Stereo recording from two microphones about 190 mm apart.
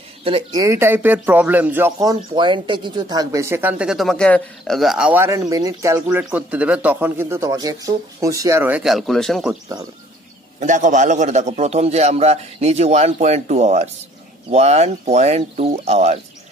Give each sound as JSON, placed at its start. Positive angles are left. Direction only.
{"t": 0.2, "sound": "speech", "side_deg": -30}
{"t": 10.6, "sound": "a man's voice", "side_deg": -40}